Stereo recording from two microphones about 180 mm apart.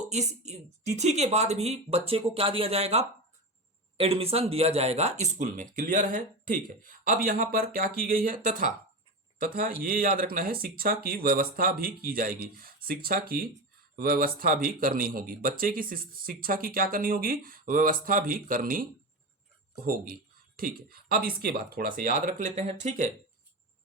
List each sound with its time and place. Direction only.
0.1 s speech: 40° right (ahead or behind)